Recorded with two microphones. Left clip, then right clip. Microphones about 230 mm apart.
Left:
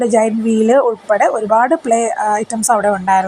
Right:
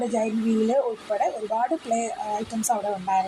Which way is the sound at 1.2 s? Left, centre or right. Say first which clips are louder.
Left 12 dB; left.